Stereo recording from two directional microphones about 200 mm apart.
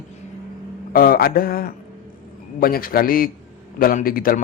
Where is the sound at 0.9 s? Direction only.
50° left (ahead or behind).